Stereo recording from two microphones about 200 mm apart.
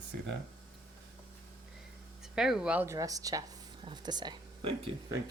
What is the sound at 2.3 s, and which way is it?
Speech, 5° right (ahead or behind).